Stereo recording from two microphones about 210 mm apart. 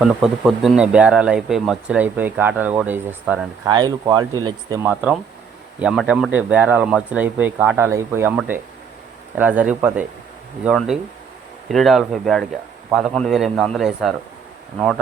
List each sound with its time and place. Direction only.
0.2 s speech: centre (ahead or behind)
3.7 s speech: 20° right (ahead or behind)
4.9 s speech: 5° right (ahead or behind)